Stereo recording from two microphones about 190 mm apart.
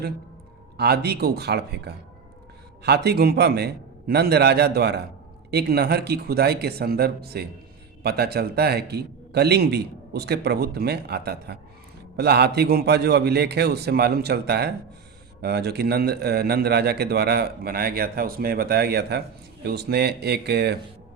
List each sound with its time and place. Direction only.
0.8 s a man's voice: 55° right (ahead or behind)